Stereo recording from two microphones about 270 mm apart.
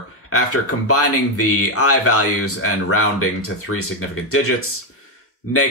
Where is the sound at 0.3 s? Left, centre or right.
Left.